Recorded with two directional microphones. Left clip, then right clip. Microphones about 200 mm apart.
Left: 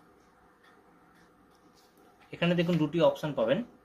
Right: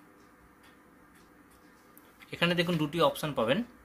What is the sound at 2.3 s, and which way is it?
Speech, 25° right (ahead or behind).